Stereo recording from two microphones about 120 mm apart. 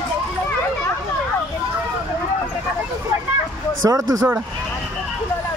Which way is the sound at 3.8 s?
25° right (ahead or behind).